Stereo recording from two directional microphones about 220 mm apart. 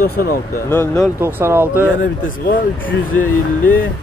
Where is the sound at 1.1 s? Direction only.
10° right (ahead or behind).